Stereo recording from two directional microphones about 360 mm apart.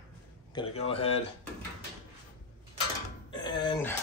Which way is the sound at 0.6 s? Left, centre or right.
Centre.